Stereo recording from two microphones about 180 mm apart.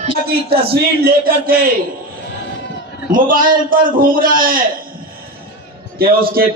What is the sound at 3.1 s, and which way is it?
A man's voice, 50° right (ahead or behind).